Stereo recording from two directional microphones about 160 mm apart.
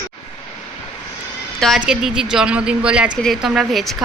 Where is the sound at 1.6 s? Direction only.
Centre (ahead or behind).